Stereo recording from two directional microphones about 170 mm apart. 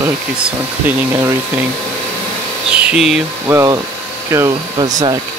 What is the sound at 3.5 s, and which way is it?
Speech, 15° right (ahead or behind).